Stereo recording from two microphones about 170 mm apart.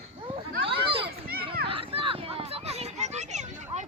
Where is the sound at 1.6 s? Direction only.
30° right (ahead or behind).